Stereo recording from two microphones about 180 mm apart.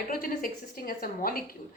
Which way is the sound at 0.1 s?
50° left (ahead or behind).